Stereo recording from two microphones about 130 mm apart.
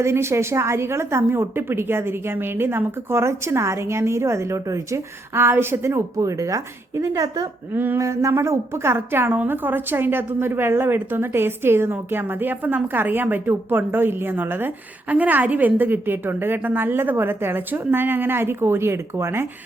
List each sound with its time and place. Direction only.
0.0 s a woman's voice: 20° right (ahead or behind)